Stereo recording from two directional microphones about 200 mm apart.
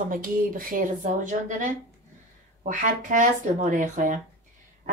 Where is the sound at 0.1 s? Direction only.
45° right (ahead or behind).